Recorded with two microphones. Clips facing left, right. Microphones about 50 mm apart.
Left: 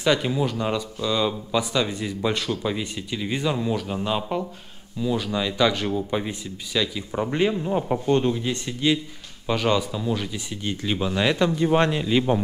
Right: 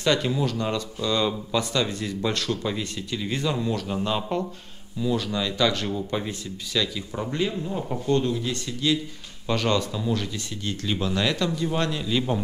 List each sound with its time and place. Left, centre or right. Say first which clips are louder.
0.0 s speech: left 1 dB; centre
9.5 s speech: left 2 dB; centre